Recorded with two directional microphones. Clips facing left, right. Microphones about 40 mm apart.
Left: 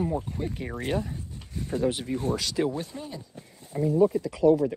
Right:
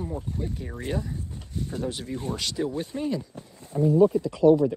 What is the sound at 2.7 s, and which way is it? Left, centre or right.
Speech, right.